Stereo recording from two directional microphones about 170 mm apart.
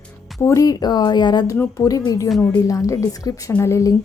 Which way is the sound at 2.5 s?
20° left (ahead or behind).